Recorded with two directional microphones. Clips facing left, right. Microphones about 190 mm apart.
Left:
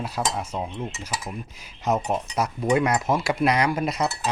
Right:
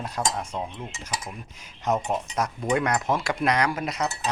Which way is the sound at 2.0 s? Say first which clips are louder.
Left 2 dB; 10° left (ahead or behind).